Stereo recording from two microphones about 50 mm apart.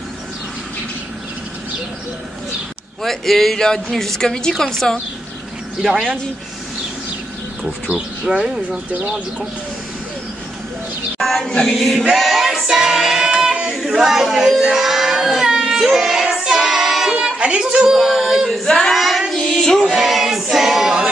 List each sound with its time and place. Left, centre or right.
3.0 s speech: centre
5.8 s speech: centre
8.3 s speech: centre
8.6 s speech: right
11.1 s a sound: centre
11.6 s choir: centre
12.1 s music: centre
13.3 s child singing: centre
13.7 s baby cry: centre
15.7 s child singing: centre
17.2 s speech: centre
19.9 s choir: centre